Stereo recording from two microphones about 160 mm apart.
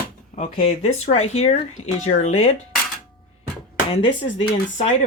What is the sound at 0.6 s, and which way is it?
Speech, 45° left (ahead or behind).